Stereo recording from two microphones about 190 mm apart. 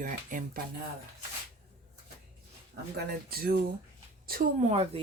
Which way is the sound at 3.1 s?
50° right (ahead or behind).